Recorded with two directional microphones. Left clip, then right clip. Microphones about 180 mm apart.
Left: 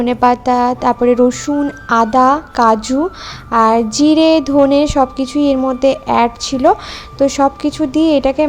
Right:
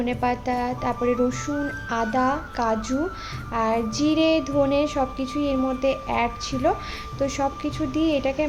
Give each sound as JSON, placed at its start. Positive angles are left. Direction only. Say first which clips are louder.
{"t": 0.0, "sound": "a woman's voice", "louder": "left 12 dB", "side_deg": 40}